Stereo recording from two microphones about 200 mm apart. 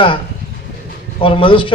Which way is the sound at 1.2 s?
25° left (ahead or behind).